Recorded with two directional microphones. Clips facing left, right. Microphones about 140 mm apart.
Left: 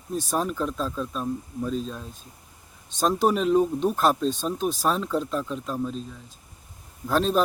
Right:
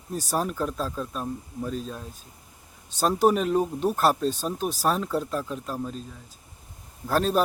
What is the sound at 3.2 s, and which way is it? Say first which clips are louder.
Speech: left 1 dB; 5° right (ahead or behind).